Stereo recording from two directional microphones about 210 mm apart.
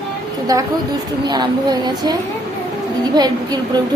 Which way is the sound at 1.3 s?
20° right (ahead or behind).